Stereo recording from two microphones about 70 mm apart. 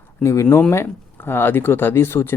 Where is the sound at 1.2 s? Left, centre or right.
Left.